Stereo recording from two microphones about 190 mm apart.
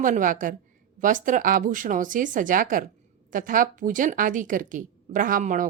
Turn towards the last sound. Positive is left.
turn(degrees=-45)  # may be behind; listen again after turning